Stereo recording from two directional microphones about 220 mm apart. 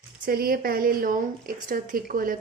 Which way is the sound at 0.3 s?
45° right (ahead or behind).